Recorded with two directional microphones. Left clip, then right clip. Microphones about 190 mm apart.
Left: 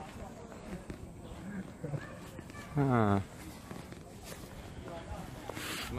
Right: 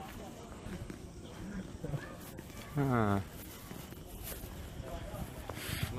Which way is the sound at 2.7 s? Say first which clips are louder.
Left 2 dB; 15° left (ahead or behind).